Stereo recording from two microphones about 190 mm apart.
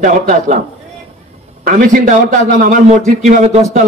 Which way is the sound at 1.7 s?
45° right (ahead or behind).